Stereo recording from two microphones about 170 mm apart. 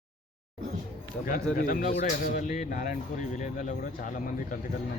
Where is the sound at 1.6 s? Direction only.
55° left (ahead or behind).